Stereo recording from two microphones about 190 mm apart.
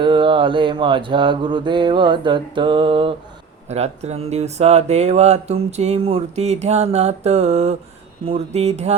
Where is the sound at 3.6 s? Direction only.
35° right (ahead or behind).